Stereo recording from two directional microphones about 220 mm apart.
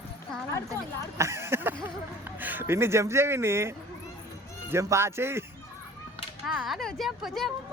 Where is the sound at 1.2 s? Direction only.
10° right (ahead or behind).